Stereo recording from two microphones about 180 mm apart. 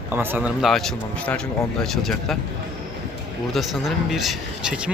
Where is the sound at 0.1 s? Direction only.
10° right (ahead or behind).